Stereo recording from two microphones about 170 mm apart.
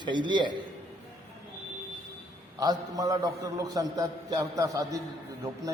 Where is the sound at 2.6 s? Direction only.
20° right (ahead or behind).